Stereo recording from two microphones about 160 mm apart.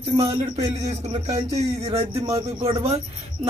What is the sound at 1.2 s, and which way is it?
A man's voice, 40° right (ahead or behind).